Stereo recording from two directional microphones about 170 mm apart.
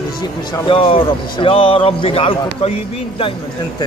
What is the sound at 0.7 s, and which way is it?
Speech, 30° left (ahead or behind).